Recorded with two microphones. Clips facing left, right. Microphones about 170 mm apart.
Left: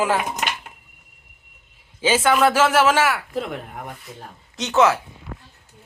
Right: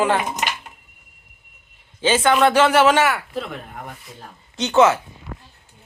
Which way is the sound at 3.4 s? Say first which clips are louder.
Left 2 dB; 10° left (ahead or behind).